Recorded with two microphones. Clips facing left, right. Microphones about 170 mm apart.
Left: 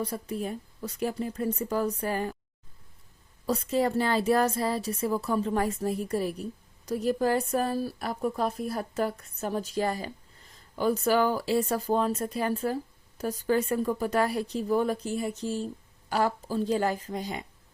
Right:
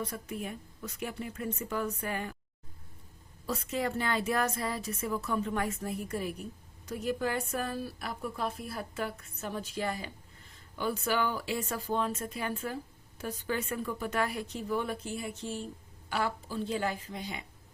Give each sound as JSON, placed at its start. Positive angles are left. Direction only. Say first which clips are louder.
{"t": 0.0, "sound": "speech", "louder": "left 5 dB", "side_deg": 35}
{"t": 3.4, "sound": "speech", "louder": "left 7 dB", "side_deg": 35}